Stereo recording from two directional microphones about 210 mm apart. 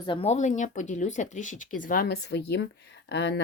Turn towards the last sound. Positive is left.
turn(degrees=55)  # may be behind; listen again after turning